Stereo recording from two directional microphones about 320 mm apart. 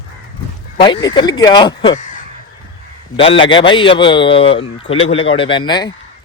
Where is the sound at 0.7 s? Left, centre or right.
Centre.